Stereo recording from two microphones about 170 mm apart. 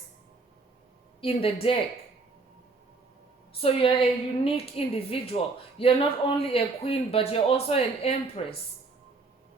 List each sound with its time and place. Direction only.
1.2 s a man's voice: 35° left (ahead or behind)
3.6 s a man's voice: 35° left (ahead or behind)